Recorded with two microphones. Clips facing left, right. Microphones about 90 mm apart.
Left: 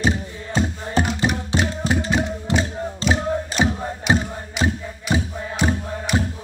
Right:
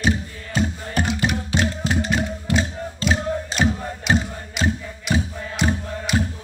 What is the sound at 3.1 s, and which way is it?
Music, 5° left (ahead or behind).